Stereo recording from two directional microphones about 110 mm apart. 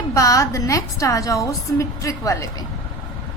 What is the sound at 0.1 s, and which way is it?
A woman's voice, 30° left (ahead or behind).